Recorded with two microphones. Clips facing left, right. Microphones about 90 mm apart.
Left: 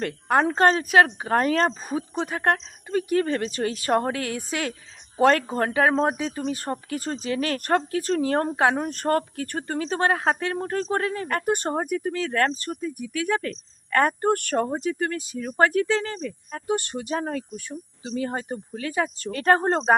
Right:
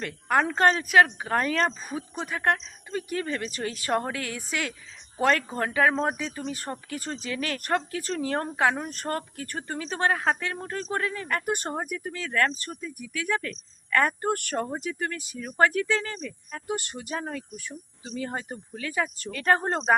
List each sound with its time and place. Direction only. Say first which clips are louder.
0.0 s speech: left 3 dB; 35° left (ahead or behind)
6.1 s speech: left 5 dB; 45° left (ahead or behind)
17.2 s speech: left 3 dB; 45° left (ahead or behind)
18.0 s speech: left 4 dB; 35° left (ahead or behind)